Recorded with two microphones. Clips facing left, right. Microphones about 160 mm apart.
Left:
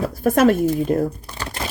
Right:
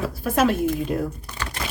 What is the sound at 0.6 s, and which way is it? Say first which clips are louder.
Speech: left 5 dB; 40° left (ahead or behind).